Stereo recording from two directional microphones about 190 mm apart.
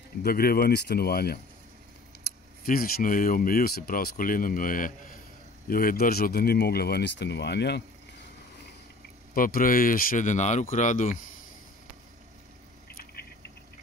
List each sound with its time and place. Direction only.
0.2 s speech: 50° left (ahead or behind)
2.6 s speech: 50° left (ahead or behind)
9.3 s speech: 50° left (ahead or behind)
12.9 s patter: 55° left (ahead or behind)